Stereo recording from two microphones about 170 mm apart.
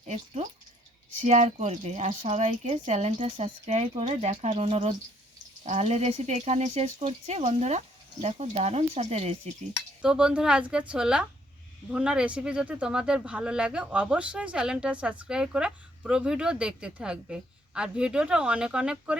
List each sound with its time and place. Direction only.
1.2 s speech: 45° right (ahead or behind)
10.0 s speech: 5° right (ahead or behind)